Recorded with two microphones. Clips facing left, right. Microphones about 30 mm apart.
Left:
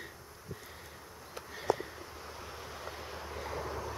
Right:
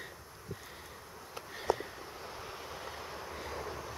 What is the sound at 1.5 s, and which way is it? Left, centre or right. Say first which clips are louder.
Vehicle: left 1 dB; centre.